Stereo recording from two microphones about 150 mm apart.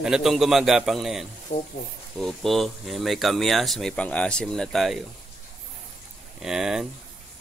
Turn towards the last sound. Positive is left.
turn(degrees=-5)  # may be behind; listen again after turning